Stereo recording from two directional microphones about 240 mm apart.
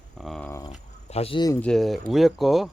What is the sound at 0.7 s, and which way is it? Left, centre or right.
Speech, left.